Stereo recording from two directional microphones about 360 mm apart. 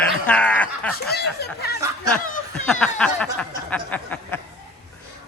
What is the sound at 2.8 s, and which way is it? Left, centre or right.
Speech, centre.